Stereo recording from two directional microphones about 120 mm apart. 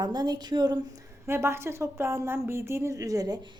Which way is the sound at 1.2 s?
20° right (ahead or behind).